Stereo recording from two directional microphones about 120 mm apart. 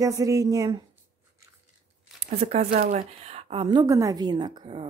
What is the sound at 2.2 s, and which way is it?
Speech, 60° right (ahead or behind).